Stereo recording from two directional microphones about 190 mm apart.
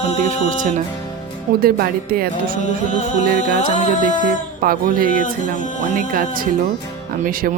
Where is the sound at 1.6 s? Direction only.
50° right (ahead or behind).